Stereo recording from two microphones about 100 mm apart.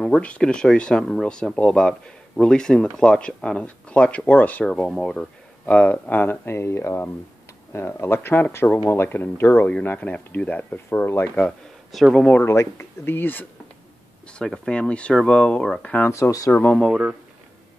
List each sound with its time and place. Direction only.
0.0 s speech: 10° left (ahead or behind)
11.9 s speech: centre (ahead or behind)
12.4 s speech: 25° left (ahead or behind)
14.4 s speech: 5° left (ahead or behind)
16.1 s speech: 30° left (ahead or behind)
16.7 s speech: centre (ahead or behind)